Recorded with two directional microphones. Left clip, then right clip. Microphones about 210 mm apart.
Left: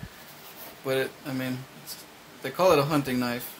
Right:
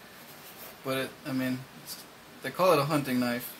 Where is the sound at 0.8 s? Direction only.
25° left (ahead or behind).